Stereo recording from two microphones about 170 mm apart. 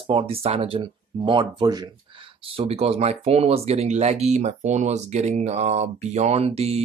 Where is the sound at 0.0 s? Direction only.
30° right (ahead or behind).